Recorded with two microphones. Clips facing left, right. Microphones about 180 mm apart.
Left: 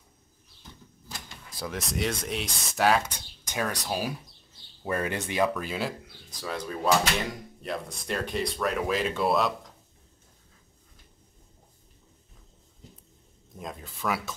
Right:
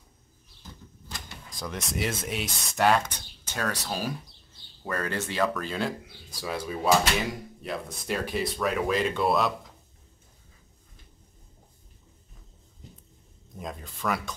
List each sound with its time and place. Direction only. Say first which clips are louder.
1.6 s speech: left 1 dB; centre (ahead or behind)
6.4 s speech: right 1 dB; 10° right (ahead or behind)
13.6 s speech: right 1 dB; centre (ahead or behind)